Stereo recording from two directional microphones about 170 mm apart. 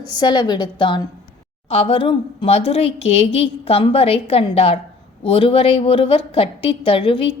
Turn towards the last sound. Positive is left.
turn(degrees=30)  # may be behind; listen again after turning